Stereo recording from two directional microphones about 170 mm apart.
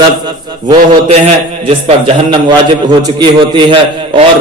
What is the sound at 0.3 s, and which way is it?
A man's voice, 25° right (ahead or behind).